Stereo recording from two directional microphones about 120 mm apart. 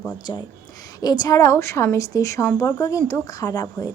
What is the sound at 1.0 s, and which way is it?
A woman's voice, 35° left (ahead or behind).